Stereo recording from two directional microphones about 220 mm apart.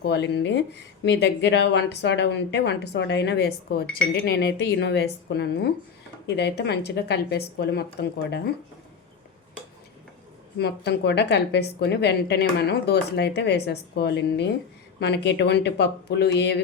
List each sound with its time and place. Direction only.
0.0 s a woman's voice: 50° left (ahead or behind)
10.6 s a woman's voice: 50° left (ahead or behind)